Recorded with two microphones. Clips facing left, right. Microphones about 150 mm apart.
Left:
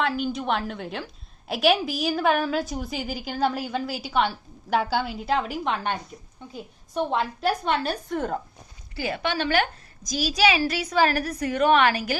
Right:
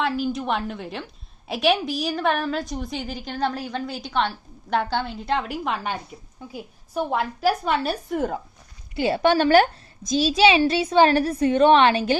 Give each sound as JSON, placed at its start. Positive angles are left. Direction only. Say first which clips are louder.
{"t": 0.0, "sound": "a woman's voice", "louder": "right 1 dB", "side_deg": 0}
{"t": 9.0, "sound": "a woman's voice", "louder": "right 7 dB", "side_deg": -30}
{"t": 9.2, "sound": "a woman's voice", "louder": "right 8 dB", "side_deg": -45}
{"t": 10.0, "sound": "a woman's voice", "louder": "right 5 dB", "side_deg": -25}